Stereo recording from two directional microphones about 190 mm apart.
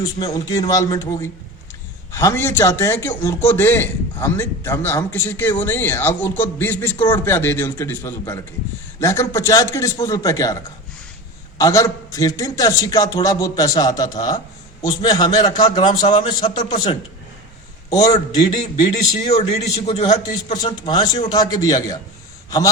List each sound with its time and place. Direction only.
0.0 s a man's voice: 15° left (ahead or behind)
18.9 s a man's voice: 35° left (ahead or behind); by 22.7 s 20° left (ahead or behind)